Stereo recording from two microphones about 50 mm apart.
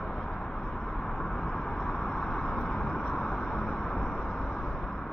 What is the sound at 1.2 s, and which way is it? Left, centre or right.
Vehicle, centre.